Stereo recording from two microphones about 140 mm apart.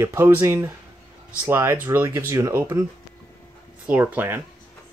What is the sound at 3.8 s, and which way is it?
Speech, 10° right (ahead or behind).